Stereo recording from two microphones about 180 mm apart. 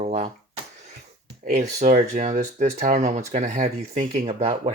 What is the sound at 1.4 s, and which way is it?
Speech, 45° right (ahead or behind).